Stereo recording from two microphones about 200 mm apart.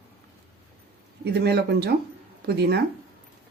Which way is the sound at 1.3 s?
55° right (ahead or behind).